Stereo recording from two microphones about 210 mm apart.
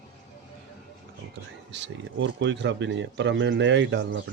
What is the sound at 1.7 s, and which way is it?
Speech, 60° right (ahead or behind).